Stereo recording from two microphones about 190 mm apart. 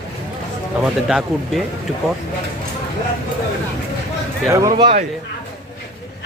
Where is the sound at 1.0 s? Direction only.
5° right (ahead or behind).